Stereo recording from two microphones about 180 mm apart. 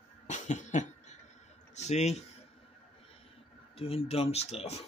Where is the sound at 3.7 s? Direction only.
30° left (ahead or behind).